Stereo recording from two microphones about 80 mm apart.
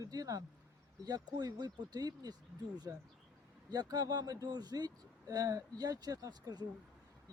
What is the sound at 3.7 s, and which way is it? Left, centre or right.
Speech, right.